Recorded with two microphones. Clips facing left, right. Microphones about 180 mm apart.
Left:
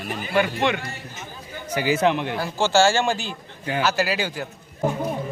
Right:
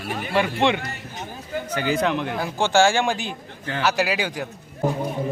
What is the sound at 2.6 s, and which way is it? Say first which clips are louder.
Speech: even; 15° right (ahead or behind).